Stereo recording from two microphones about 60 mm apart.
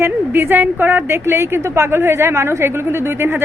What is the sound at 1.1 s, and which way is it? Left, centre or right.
A woman's voice, right.